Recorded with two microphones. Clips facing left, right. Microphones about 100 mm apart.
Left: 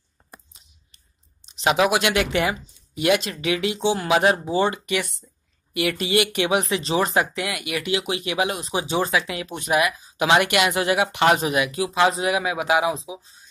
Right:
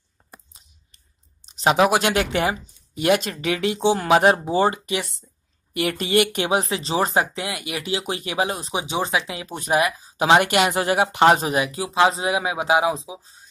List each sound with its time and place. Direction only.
1.4 s speech: 40° right (ahead or behind)
4.8 s speech: 30° right (ahead or behind)
5.7 s speech: 50° right (ahead or behind)
6.4 s speech: 30° right (ahead or behind)
8.0 s speech: 45° right (ahead or behind)
8.7 s speech: 20° right (ahead or behind); by 13.5 s 35° right (ahead or behind)